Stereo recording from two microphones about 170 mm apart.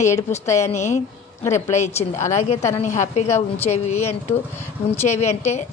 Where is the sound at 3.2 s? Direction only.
15° left (ahead or behind).